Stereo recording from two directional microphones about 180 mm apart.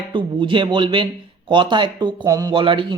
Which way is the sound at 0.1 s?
25° right (ahead or behind).